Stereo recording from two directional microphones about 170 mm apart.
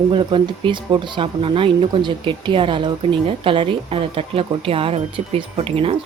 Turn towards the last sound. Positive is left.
turn(degrees=-35)  # may be behind; listen again after turning